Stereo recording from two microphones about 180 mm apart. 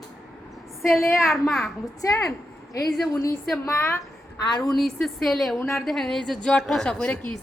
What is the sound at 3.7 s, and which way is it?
Speech, 15° left (ahead or behind).